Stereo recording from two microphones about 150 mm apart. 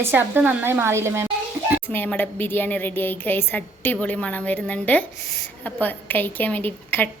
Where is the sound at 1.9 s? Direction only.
15° left (ahead or behind).